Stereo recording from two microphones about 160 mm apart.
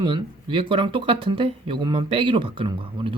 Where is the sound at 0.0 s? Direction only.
30° right (ahead or behind).